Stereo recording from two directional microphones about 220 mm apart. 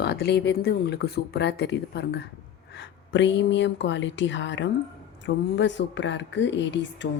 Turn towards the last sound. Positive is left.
turn(degrees=55)  # may be behind; listen again after turning